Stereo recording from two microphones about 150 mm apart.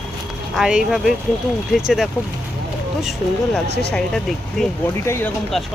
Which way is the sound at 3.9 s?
5° left (ahead or behind).